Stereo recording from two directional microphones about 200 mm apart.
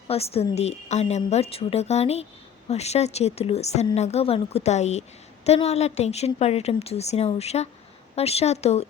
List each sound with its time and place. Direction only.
0.1 s a woman's voice: 30° left (ahead or behind)